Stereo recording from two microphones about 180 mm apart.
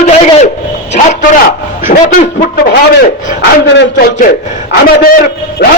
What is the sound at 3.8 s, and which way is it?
A man's voice, 60° left (ahead or behind).